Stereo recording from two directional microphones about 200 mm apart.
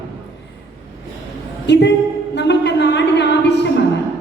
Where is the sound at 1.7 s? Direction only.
60° left (ahead or behind).